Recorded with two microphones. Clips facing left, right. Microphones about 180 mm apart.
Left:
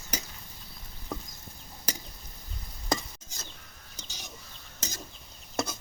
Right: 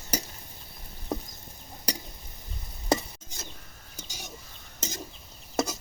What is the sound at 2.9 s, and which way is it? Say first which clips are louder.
Stir: right 5 dB; 25° right (ahead or behind).